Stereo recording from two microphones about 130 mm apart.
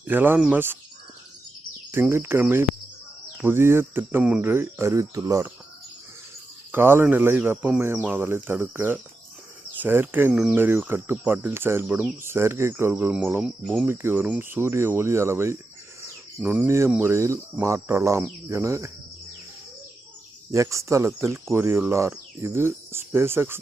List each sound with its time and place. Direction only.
0.0 s speech: 15° right (ahead or behind)
1.9 s speech: 15° right (ahead or behind)
6.7 s speech: 15° right (ahead or behind)
16.0 s cricket: 10° right (ahead or behind)
16.9 s speech: 20° right (ahead or behind)
20.5 s speech: 25° right (ahead or behind)